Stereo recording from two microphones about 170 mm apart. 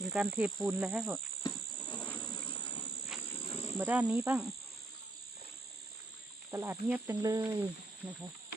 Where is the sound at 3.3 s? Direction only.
35° left (ahead or behind).